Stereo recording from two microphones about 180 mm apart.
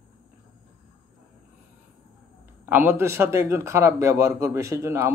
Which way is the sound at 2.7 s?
10° right (ahead or behind).